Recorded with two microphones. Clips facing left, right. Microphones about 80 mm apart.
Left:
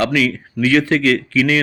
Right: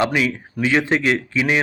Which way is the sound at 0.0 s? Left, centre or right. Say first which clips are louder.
Left 2 dB; right.